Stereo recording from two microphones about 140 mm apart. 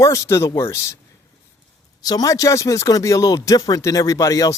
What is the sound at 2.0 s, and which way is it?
Speech, 25° left (ahead or behind).